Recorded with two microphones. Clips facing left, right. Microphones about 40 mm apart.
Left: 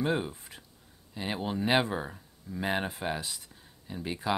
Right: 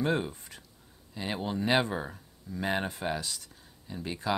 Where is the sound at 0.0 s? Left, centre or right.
Centre.